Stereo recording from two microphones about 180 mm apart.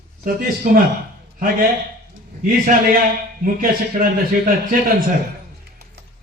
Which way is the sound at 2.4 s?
50° right (ahead or behind).